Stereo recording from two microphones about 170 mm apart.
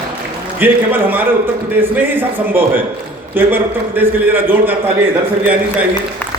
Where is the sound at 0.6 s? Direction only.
10° right (ahead or behind).